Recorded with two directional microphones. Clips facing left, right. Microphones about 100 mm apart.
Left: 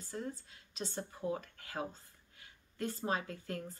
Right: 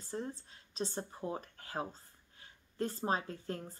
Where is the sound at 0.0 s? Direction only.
35° right (ahead or behind).